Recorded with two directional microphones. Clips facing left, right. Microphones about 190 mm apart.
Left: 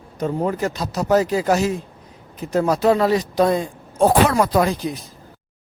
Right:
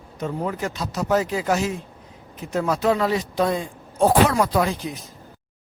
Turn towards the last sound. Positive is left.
turn(degrees=35)  # may be behind; listen again after turning